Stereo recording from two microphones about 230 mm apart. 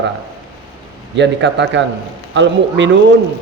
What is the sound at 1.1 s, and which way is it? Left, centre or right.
A man's voice, right.